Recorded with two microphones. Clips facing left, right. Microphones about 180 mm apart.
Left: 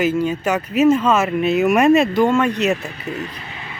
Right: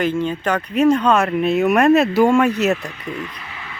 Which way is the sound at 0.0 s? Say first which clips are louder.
Left 1 dB; 5° left (ahead or behind).